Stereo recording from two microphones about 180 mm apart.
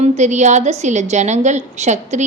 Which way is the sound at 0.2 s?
40° right (ahead or behind).